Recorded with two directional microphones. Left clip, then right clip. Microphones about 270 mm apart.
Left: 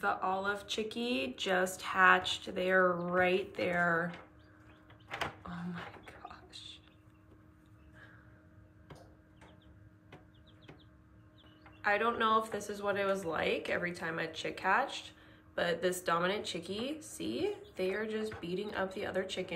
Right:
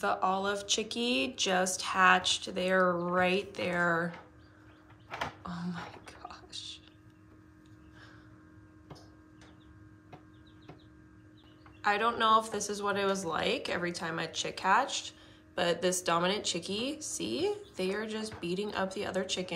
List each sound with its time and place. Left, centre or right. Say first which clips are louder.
0.0 s speech: right 3 dB; centre
5.4 s music: right 3 dB; centre
11.8 s speech: right 2 dB; centre